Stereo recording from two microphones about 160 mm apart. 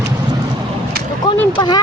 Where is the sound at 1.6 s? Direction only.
25° left (ahead or behind).